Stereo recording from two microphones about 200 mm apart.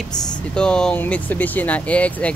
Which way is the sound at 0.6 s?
5° left (ahead or behind).